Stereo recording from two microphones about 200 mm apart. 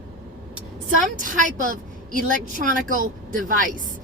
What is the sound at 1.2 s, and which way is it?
Speech, 40° right (ahead or behind).